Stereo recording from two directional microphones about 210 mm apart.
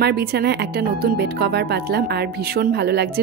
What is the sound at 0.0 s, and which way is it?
Speech, 50° right (ahead or behind).